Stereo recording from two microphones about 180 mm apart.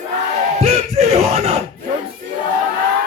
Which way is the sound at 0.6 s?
35° right (ahead or behind).